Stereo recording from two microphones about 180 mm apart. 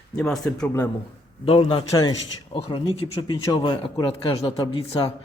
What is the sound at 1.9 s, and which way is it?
Speech, 20° left (ahead or behind).